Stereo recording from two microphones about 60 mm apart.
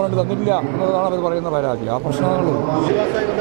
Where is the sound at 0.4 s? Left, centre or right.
Right.